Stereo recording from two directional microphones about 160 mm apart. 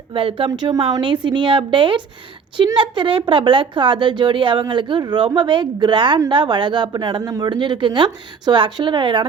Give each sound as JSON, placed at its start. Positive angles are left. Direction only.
{"t": 0.1, "sound": "a woman's voice", "side_deg": -35}